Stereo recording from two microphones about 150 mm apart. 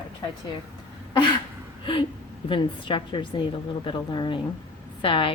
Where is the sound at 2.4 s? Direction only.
35° left (ahead or behind).